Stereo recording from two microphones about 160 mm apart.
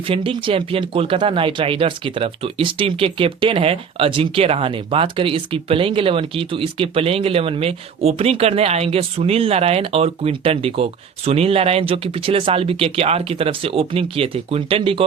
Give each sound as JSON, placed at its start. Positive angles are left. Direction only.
{"t": 0.1, "sound": "speech", "side_deg": -30}